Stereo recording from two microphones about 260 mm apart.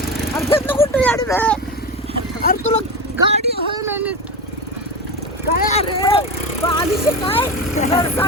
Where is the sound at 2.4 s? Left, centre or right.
Left.